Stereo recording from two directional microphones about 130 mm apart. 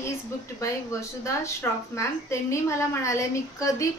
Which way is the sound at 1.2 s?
20° left (ahead or behind).